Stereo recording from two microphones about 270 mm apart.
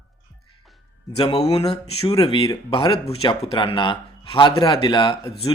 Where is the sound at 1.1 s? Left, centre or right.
Centre.